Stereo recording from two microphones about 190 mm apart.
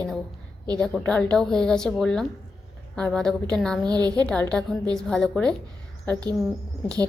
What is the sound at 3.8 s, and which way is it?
Speech, 20° right (ahead or behind).